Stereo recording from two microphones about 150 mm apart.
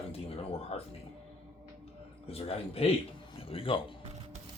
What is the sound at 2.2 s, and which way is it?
Speech, 40° left (ahead or behind).